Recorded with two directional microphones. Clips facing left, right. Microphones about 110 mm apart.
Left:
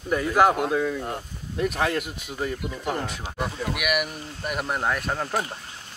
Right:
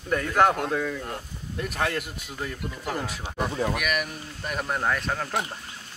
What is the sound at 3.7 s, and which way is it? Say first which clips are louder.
Speech: left 2 dB; 10° left (ahead or behind).